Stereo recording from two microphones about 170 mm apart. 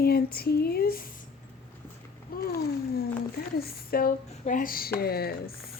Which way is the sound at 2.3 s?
60° left (ahead or behind).